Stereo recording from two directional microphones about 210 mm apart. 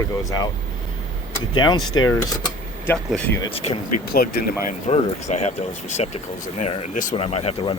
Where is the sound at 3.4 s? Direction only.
25° left (ahead or behind).